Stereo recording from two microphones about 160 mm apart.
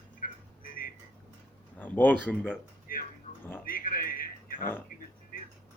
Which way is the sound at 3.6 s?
65° left (ahead or behind).